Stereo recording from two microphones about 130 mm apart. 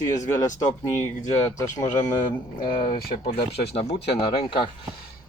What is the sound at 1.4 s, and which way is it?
Speech, 20° left (ahead or behind).